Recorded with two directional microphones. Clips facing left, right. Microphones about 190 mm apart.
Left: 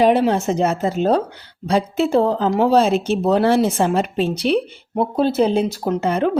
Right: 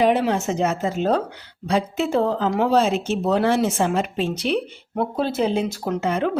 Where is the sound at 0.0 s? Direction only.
35° left (ahead or behind).